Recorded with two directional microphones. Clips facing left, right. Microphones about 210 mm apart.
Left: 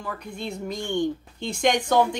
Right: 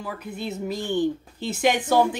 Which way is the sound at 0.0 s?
5° right (ahead or behind).